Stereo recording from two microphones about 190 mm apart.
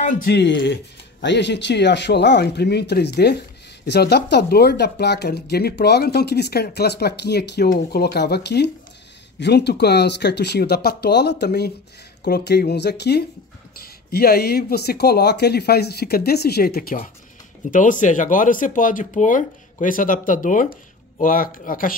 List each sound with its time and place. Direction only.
0.0 s speech: 50° left (ahead or behind)